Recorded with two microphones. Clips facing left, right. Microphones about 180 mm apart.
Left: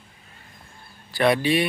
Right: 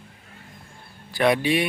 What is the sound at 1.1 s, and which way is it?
Speech, 15° right (ahead or behind).